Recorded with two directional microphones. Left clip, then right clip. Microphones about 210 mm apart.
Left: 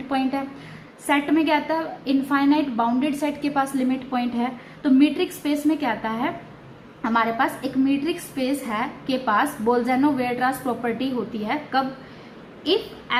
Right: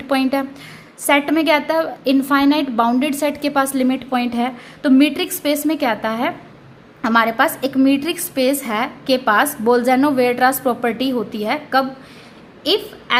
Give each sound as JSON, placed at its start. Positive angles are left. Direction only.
{"t": 0.1, "sound": "a woman's voice", "side_deg": -55}